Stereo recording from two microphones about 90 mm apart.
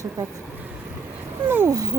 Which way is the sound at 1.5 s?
25° right (ahead or behind).